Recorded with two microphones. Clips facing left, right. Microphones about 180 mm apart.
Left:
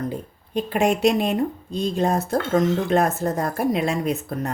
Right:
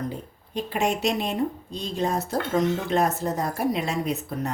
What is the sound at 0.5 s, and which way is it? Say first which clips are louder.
Speech: left 5 dB; 55° left (ahead or behind).